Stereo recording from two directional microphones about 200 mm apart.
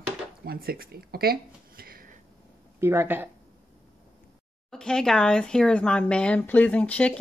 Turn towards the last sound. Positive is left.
turn(degrees=5)  # may be behind; listen again after turning